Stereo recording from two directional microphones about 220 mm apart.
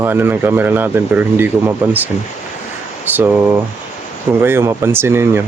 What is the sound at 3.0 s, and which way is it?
Speech, 10° right (ahead or behind).